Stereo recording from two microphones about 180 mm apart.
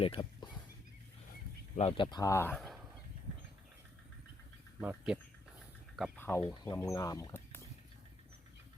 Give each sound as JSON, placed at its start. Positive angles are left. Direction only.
{"t": 0.0, "sound": "speech", "side_deg": 25}
{"t": 1.7, "sound": "speech", "side_deg": 35}
{"t": 4.8, "sound": "speech", "side_deg": -10}
{"t": 6.1, "sound": "speech", "side_deg": 10}